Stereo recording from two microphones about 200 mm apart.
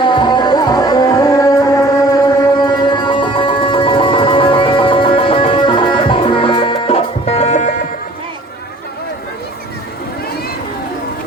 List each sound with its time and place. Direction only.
0.0 s music: 25° left (ahead or behind)